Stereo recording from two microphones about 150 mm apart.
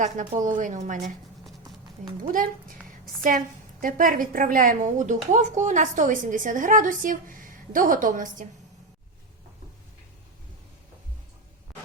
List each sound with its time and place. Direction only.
0.0 s a woman's voice: 60° right (ahead or behind)
2.2 s a woman's voice: 70° right (ahead or behind)